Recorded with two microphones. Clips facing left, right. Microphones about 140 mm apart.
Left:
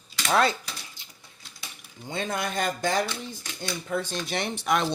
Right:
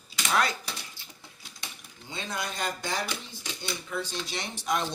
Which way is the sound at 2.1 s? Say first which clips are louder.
Left 6 dB; 55° left (ahead or behind).